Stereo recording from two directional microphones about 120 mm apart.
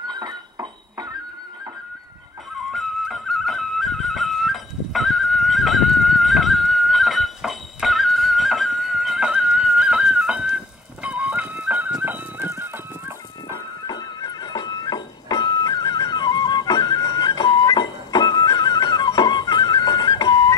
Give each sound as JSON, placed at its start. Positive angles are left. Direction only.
{"t": 0.0, "sound": "a sound", "side_deg": -35}
{"t": 2.7, "sound": "flute", "side_deg": 0}
{"t": 13.8, "sound": "music", "side_deg": 35}